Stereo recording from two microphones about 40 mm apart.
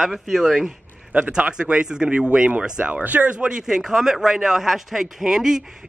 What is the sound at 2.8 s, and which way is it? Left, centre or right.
Speech, right.